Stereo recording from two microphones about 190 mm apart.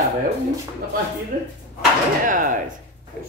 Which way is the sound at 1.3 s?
50° right (ahead or behind).